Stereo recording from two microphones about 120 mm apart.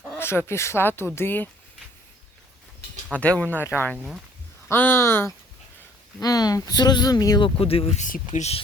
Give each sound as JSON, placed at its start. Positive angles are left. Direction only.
{"t": 0.2, "sound": "speech", "side_deg": 20}
{"t": 3.1, "sound": "speech", "side_deg": 10}
{"t": 6.1, "sound": "speech", "side_deg": 30}
{"t": 7.6, "sound": "speech", "side_deg": 55}
{"t": 8.0, "sound": "speech", "side_deg": 80}